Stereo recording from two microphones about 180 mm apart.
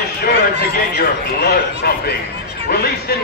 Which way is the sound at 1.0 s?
60° left (ahead or behind).